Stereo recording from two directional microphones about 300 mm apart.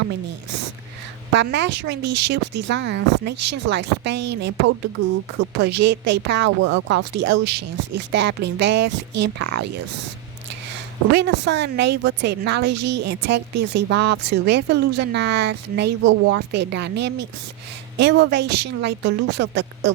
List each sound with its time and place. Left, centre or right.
1.3 s a woman's voice: right
5.5 s a woman's voice: right
11.1 s a woman's voice: right